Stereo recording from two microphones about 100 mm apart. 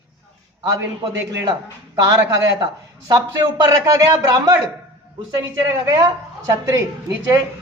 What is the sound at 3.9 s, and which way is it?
Speech, 35° right (ahead or behind).